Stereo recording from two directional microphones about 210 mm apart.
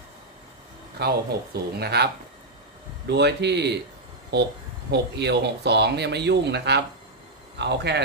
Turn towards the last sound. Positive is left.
turn(degrees=-55)  # may be behind; listen again after turning